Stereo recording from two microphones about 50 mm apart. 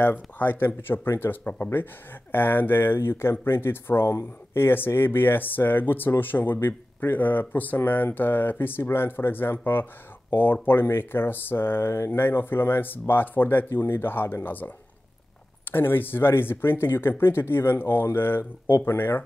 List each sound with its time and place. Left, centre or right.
0.0 s speech: left